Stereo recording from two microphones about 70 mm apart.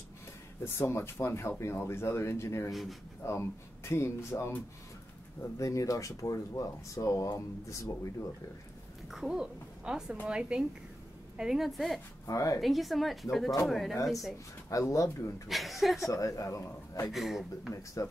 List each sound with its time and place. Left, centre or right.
0.7 s speech: left
2.7 s speech: centre
3.3 s speech: left
9.1 s a woman's voice: centre
12.3 s speech: left
12.5 s speech: centre
14.7 s speech: left
15.4 s speech: centre
16.1 s speech: left
17.1 s speech: centre